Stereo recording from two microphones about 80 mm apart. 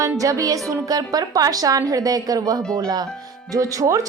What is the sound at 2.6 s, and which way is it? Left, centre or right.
Speech, centre.